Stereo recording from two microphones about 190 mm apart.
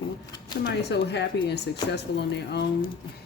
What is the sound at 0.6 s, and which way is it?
Speech, 60° left (ahead or behind).